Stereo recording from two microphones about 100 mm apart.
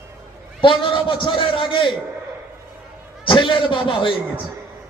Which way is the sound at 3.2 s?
55° left (ahead or behind).